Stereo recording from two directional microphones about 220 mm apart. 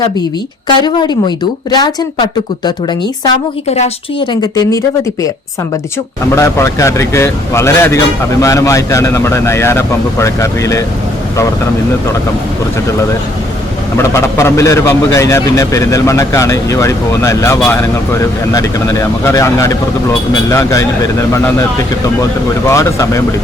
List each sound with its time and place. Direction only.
0.8 s a woman's voice: 20° left (ahead or behind)
3.7 s a woman's voice: 30° left (ahead or behind)
6.3 s a man's voice: 10° left (ahead or behind)
13.9 s a man's voice: 10° left (ahead or behind)